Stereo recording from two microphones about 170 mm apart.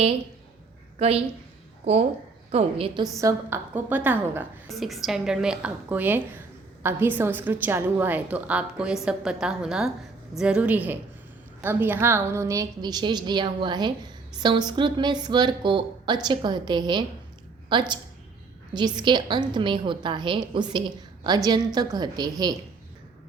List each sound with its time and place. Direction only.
0.9 s a woman's voice: 35° right (ahead or behind)
3.2 s a woman's voice: 15° right (ahead or behind)